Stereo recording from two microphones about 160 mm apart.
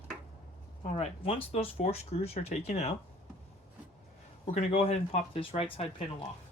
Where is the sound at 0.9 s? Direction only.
35° left (ahead or behind).